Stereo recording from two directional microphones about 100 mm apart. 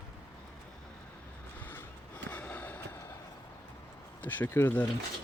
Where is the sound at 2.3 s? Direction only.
15° left (ahead or behind).